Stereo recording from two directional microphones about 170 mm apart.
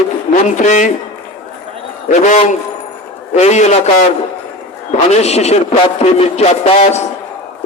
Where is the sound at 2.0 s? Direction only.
45° left (ahead or behind).